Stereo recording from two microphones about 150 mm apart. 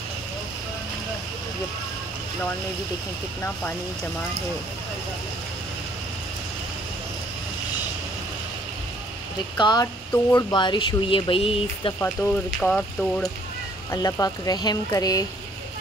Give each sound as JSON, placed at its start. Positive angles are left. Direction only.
{"t": 9.6, "sound": "speech", "side_deg": 30}
{"t": 12.2, "sound": "speech", "side_deg": 20}
{"t": 12.6, "sound": "rain on surface", "side_deg": 5}
{"t": 13.9, "sound": "speech", "side_deg": 20}